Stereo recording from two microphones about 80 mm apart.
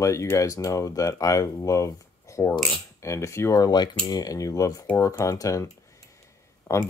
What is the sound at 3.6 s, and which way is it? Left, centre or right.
Speech, left.